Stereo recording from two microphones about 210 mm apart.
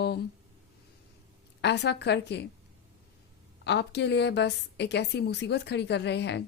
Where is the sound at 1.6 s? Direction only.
55° left (ahead or behind).